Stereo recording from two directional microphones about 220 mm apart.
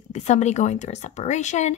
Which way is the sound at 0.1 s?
30° left (ahead or behind).